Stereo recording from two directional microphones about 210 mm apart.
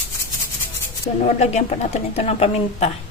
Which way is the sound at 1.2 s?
30° left (ahead or behind).